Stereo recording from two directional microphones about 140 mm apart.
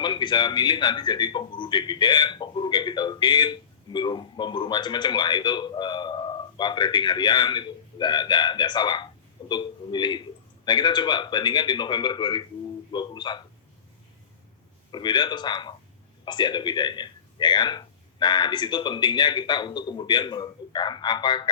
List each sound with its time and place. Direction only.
0.0 s a man's voice: 30° left (ahead or behind)
12.9 s a sound: 30° left (ahead or behind)
14.9 s a man's voice: 30° left (ahead or behind)